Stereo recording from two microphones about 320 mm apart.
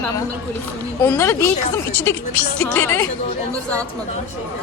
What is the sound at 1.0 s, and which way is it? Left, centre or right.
A woman's voice, centre.